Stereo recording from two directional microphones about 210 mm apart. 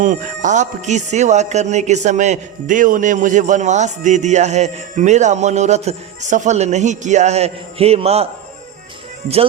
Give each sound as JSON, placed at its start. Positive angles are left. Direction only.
{"t": 0.0, "sound": "speech", "side_deg": -35}